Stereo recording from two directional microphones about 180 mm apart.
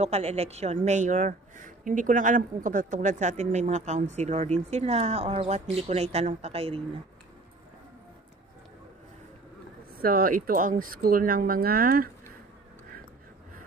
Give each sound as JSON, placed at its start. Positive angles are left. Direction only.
{"t": 0.0, "sound": "a woman's voice", "side_deg": -35}
{"t": 10.0, "sound": "speech", "side_deg": -55}